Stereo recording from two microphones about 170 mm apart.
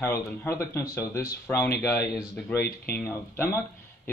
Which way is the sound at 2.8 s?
10° left (ahead or behind).